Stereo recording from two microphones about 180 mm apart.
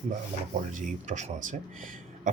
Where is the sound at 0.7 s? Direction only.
45° right (ahead or behind).